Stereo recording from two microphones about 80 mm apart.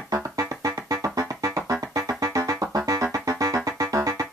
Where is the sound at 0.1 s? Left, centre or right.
Right.